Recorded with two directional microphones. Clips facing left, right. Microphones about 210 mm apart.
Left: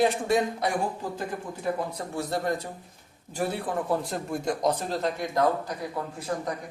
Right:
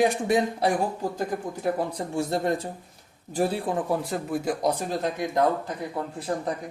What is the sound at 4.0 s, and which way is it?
Speech, 5° right (ahead or behind).